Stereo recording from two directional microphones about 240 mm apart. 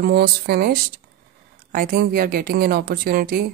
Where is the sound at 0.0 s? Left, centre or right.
Right.